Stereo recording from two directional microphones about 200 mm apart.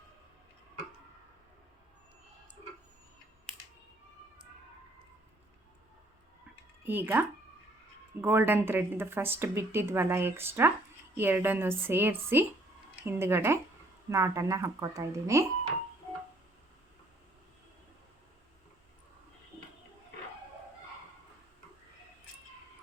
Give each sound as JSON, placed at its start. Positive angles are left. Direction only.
{"t": 6.8, "sound": "a woman's voice", "side_deg": -10}